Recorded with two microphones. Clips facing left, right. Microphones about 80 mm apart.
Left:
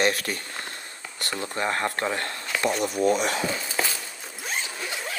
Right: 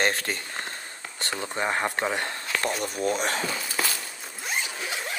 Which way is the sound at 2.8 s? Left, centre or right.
Left.